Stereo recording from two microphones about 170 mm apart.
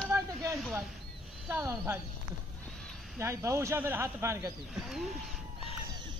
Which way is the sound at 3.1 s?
15° right (ahead or behind).